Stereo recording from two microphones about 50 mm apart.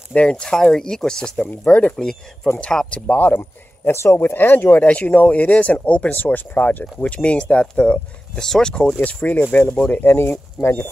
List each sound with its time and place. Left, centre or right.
0.1 s speech: centre
1.5 s speech: left
2.0 s speech: centre
3.2 s speech: left
3.9 s speech: left
4.8 s speech: left; by 8.8 s centre
9.0 s speech: left
9.9 s speech: left